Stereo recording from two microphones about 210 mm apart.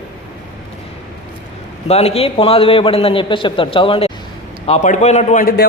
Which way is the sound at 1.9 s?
30° left (ahead or behind).